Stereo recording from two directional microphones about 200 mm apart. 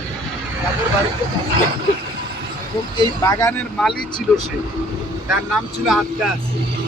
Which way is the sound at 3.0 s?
15° left (ahead or behind).